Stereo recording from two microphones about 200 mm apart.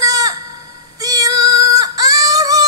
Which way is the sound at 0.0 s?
20° right (ahead or behind).